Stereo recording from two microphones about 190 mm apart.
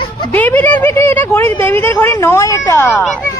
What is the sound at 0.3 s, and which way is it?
A child's voice, 10° left (ahead or behind).